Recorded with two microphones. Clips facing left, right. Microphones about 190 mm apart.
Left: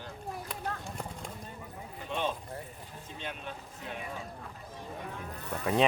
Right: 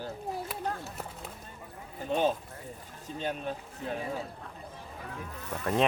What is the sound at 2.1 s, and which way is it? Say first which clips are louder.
Speech: right 6 dB; 40° right (ahead or behind).